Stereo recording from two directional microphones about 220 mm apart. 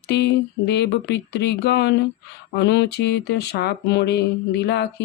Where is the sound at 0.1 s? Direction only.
50° left (ahead or behind).